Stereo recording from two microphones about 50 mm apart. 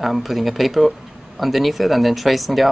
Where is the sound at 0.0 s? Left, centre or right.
Centre.